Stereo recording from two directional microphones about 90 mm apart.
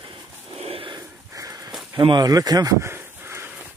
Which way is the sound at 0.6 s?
90° right.